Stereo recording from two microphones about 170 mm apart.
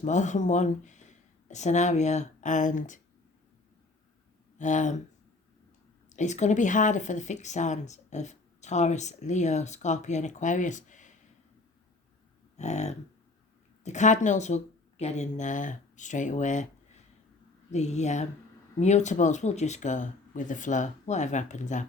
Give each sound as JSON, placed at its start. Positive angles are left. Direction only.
{"t": 0.0, "sound": "speech", "side_deg": 45}
{"t": 4.5, "sound": "speech", "side_deg": 45}
{"t": 6.1, "sound": "speech", "side_deg": 45}
{"t": 12.5, "sound": "a sound", "side_deg": 40}
{"t": 13.8, "sound": "speech", "side_deg": 45}